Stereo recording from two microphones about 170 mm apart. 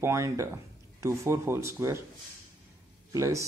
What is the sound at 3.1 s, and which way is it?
Speech, 20° right (ahead or behind).